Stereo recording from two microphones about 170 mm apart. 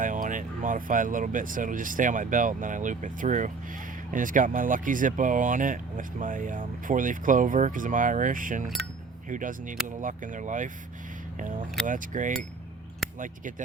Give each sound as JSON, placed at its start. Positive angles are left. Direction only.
{"t": 0.0, "sound": "speech", "side_deg": -50}